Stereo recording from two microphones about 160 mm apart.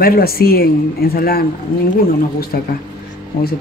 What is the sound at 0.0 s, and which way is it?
Speech, 70° left (ahead or behind).